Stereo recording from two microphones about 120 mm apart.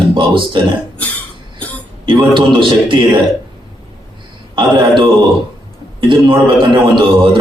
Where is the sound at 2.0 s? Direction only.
45° right (ahead or behind).